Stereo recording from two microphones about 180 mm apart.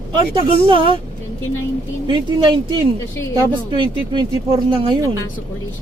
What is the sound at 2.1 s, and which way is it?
Speech, 25° right (ahead or behind).